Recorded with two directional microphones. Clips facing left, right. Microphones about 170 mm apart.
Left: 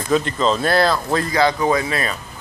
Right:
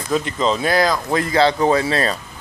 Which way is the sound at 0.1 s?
15° right (ahead or behind).